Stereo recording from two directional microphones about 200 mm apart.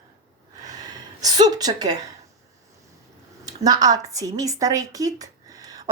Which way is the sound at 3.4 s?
20° right (ahead or behind).